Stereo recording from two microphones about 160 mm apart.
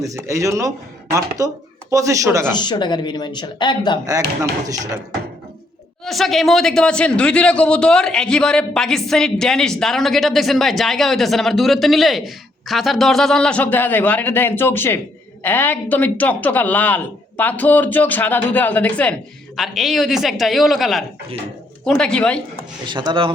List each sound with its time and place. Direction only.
0.0 s speech: 20° right (ahead or behind)
2.5 s speech: 25° left (ahead or behind)
4.0 s speech: 20° right (ahead or behind)
6.1 s speech: centre (ahead or behind)
22.9 s speech: 30° right (ahead or behind)